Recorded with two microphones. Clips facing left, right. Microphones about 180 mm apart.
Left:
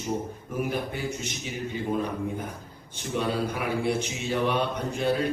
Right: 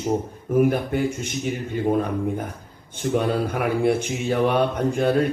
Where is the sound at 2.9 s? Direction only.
50° right (ahead or behind).